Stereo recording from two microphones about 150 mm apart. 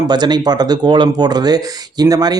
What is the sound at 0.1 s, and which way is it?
Speech, 30° right (ahead or behind).